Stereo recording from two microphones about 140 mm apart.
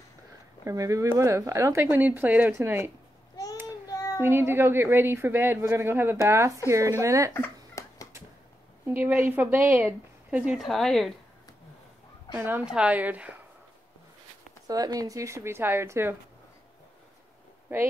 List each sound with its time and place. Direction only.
0.7 s a woman's voice: 25° right (ahead or behind)
3.9 s child singing: 25° left (ahead or behind)
4.2 s a woman's voice: 15° right (ahead or behind)
7.3 s a sound: 15° left (ahead or behind)
8.8 s speech: 15° right (ahead or behind); by 11.1 s centre (ahead or behind)
12.4 s speech: 15° right (ahead or behind)
14.7 s a woman's voice: 25° right (ahead or behind)
17.7 s speech: 15° right (ahead or behind)